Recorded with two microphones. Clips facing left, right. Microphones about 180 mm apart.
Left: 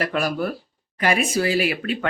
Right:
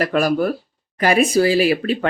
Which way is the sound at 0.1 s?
45° right (ahead or behind).